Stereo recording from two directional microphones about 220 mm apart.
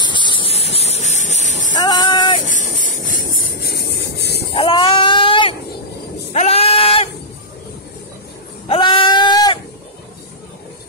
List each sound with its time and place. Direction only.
0.0 s a sound: 20° left (ahead or behind)
1.8 s music: 20° left (ahead or behind)
2.4 s vehicle: 35° left (ahead or behind)
4.6 s cat: 25° left (ahead or behind)
6.3 s goat: 30° left (ahead or behind)
8.6 s goat: 25° left (ahead or behind)